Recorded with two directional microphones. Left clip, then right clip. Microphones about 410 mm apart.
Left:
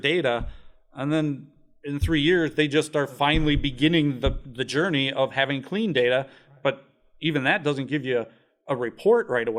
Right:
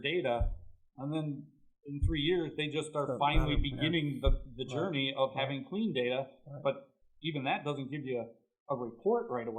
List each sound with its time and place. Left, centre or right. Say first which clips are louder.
0.0 s speech: left 9 dB; left